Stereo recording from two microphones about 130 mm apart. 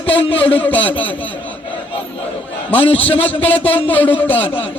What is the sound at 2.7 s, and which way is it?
Speech, 45° left (ahead or behind).